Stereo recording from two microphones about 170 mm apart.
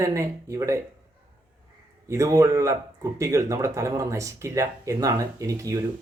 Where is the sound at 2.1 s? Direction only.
20° right (ahead or behind).